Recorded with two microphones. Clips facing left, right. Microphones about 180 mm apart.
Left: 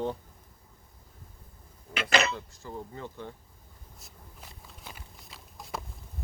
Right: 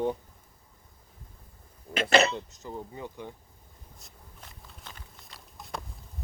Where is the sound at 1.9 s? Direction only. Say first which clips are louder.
Right 4 dB; 30° right (ahead or behind); by 3.3 s 15° right (ahead or behind).